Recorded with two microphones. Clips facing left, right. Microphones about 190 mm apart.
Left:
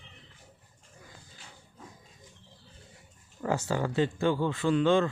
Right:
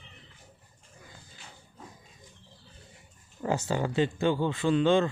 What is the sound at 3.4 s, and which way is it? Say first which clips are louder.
Speech: right 1 dB; 20° right (ahead or behind).